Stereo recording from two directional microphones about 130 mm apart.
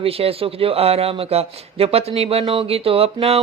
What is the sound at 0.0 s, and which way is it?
A man's voice, 50° right (ahead or behind).